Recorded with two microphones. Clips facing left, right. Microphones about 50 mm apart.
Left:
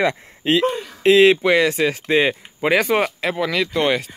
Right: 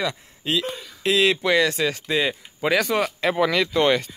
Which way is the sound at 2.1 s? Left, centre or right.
Left.